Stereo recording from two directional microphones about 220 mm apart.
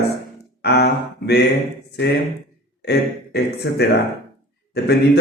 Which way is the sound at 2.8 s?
50° left (ahead or behind).